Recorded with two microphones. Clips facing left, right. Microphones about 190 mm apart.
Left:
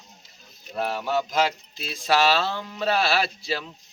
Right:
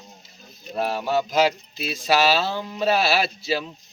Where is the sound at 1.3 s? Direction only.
10° right (ahead or behind).